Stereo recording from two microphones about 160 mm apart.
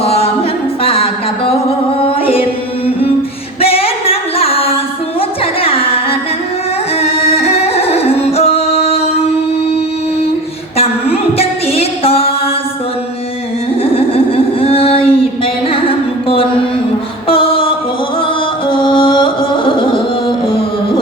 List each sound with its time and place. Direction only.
0.0 s music: 40° left (ahead or behind)
3.6 s singing: 40° left (ahead or behind)
5.4 s music: 35° left (ahead or behind)
9.7 s a sound: 40° left (ahead or behind)
10.8 s music: 40° left (ahead or behind)
13.9 s a sound: 35° left (ahead or behind)
15.7 s music: 35° left (ahead or behind)